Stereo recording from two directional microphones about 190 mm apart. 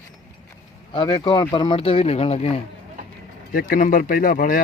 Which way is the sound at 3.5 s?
50° left (ahead or behind).